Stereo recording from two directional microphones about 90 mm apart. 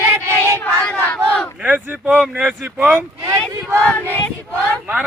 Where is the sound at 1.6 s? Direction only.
15° right (ahead or behind).